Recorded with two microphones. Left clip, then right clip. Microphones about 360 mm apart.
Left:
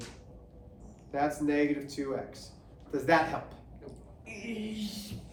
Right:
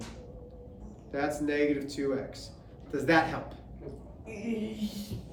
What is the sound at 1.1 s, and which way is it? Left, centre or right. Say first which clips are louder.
Speech: left 1 dB; centre.